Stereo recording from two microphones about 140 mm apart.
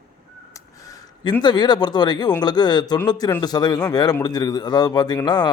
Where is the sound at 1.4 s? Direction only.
30° left (ahead or behind).